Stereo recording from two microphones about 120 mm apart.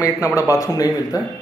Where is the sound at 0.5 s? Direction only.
25° left (ahead or behind).